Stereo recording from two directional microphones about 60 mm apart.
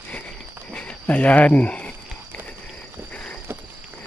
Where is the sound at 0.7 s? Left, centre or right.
Left.